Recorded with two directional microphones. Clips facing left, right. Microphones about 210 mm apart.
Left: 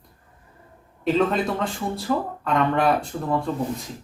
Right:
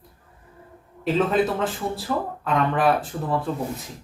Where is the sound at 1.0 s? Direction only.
Centre (ahead or behind).